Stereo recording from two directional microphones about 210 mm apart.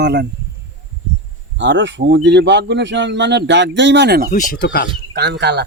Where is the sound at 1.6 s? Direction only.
60° right (ahead or behind).